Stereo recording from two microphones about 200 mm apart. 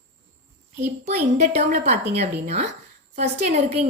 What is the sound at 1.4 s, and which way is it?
A woman's voice, 35° right (ahead or behind).